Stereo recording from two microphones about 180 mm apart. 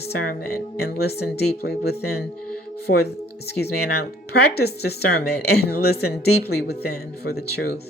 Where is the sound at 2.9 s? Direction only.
70° left (ahead or behind).